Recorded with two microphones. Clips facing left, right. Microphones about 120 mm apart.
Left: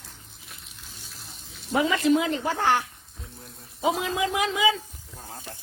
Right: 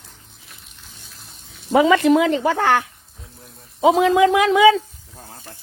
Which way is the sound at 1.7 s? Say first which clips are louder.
Right 8 dB; 90° right.